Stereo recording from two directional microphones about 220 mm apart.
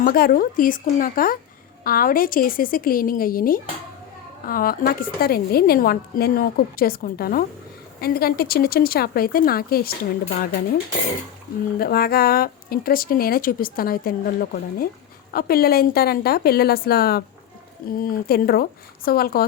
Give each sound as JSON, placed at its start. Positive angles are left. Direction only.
{"t": 0.0, "sound": "a woman's voice", "side_deg": 40}
{"t": 11.8, "sound": "a woman's voice", "side_deg": 45}